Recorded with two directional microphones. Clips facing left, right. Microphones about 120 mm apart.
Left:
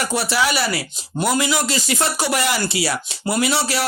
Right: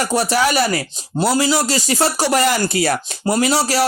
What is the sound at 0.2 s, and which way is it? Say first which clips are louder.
Speech: right 4 dB; 45° right (ahead or behind).